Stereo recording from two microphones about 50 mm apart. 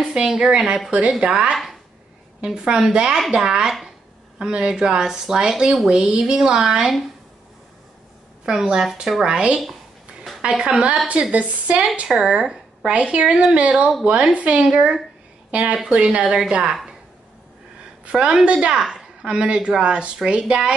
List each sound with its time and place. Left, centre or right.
0.0 s a sound: centre
0.4 s a woman's voice: centre
8.5 s a woman's voice: centre
14.7 s a woman's voice: centre
18.0 s a woman's voice: right